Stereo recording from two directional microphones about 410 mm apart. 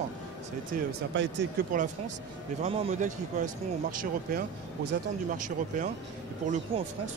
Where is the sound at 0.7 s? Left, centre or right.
Right.